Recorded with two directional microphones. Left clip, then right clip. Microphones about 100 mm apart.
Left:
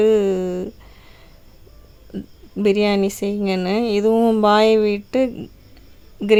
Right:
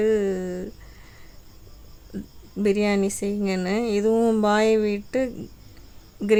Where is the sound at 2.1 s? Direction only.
20° left (ahead or behind).